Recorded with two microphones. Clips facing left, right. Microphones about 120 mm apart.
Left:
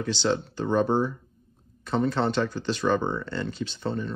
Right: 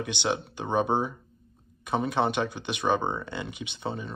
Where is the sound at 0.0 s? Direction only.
15° right (ahead or behind).